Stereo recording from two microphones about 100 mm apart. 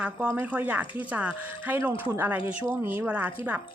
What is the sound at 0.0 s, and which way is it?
A woman's voice, 10° right (ahead or behind).